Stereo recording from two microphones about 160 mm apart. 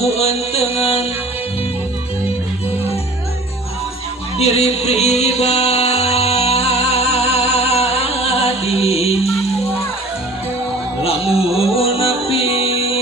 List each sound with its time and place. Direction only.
0.0 s music: 40° left (ahead or behind)
4.4 s music: 40° left (ahead or behind)
11.0 s music: 35° left (ahead or behind)